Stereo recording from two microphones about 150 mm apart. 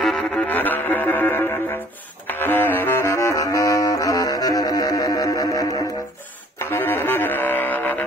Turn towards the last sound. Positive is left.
turn(degrees=10)  # may be behind; listen again after turning